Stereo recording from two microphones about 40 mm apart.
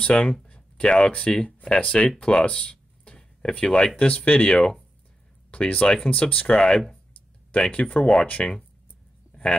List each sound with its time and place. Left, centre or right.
0.2 s speech: centre
2.5 s a sound: left
3.5 s speech: centre
3.9 s speech: left
5.5 s speech: left
9.3 s a sound: left